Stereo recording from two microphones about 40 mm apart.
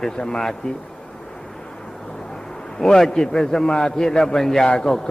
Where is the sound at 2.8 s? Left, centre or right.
Centre.